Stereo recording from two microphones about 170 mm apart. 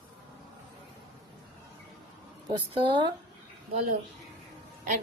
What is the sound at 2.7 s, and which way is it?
Speech, 25° right (ahead or behind).